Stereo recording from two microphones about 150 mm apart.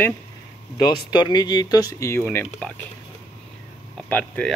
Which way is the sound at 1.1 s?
30° left (ahead or behind).